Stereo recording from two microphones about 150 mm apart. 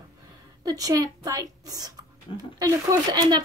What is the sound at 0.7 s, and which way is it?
A woman's voice, 25° right (ahead or behind).